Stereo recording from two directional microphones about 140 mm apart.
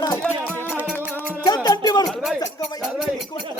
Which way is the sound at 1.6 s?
30° left (ahead or behind).